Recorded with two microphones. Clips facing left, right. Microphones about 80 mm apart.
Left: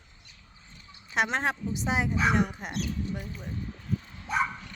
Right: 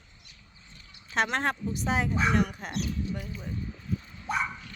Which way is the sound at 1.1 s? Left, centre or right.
Centre.